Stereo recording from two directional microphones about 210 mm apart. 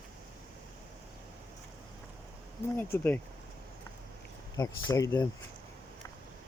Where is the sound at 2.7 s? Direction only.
10° left (ahead or behind).